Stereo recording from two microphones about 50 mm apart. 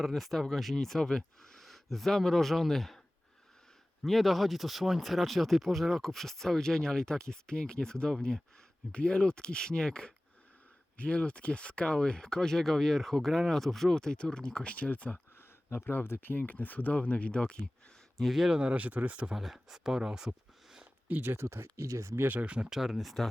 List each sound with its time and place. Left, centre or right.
0.0 s speech: centre
4.0 s speech: centre
10.9 s speech: left
15.4 s a sound: left
16.0 s speech: left
18.2 s speech: centre
18.6 s speech: right
19.3 s speech: centre
20.0 s a sound: centre
21.1 s speech: right
21.4 s speech: right
22.2 s speech: right
22.4 s speech: right
22.7 s speech: centre